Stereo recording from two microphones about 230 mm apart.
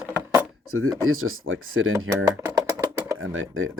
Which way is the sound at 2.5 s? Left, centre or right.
Centre.